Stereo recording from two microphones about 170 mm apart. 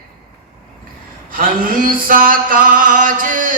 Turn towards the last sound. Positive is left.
turn(degrees=-50)  # may be behind; listen again after turning